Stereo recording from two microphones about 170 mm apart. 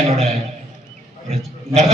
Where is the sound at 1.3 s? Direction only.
40° right (ahead or behind).